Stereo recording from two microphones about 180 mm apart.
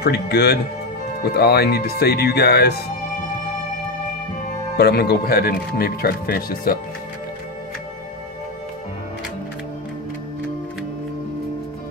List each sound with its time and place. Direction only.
0.0 s speech: 60° left (ahead or behind)
4.7 s speech: 65° left (ahead or behind)